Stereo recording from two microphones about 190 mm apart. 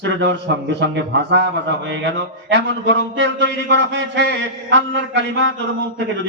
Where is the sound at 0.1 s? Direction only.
70° right (ahead or behind).